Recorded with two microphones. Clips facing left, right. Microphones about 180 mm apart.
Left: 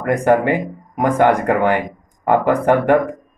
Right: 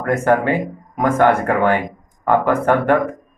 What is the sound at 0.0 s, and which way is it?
Speech, 15° left (ahead or behind).